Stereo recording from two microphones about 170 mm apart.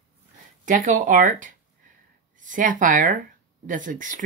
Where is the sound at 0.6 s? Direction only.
45° right (ahead or behind).